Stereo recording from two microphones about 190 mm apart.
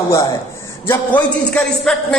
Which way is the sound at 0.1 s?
15° left (ahead or behind).